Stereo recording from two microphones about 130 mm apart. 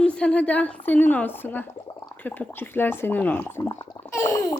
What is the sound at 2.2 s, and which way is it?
A woman's voice, 15° left (ahead or behind).